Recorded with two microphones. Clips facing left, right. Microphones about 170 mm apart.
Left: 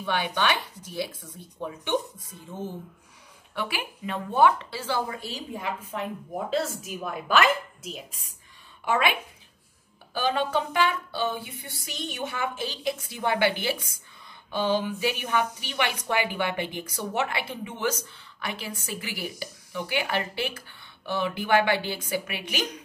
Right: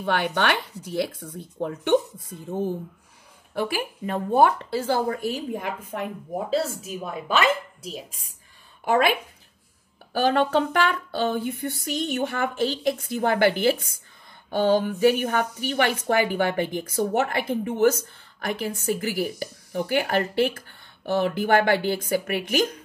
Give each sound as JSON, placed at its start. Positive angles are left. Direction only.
{"t": 0.0, "sound": "speech", "side_deg": -55}
{"t": 3.5, "sound": "speech", "side_deg": -40}
{"t": 6.3, "sound": "speech", "side_deg": -30}
{"t": 8.1, "sound": "speech", "side_deg": 40}
{"t": 8.8, "sound": "a woman's voice", "side_deg": -40}
{"t": 10.1, "sound": "speech", "side_deg": -50}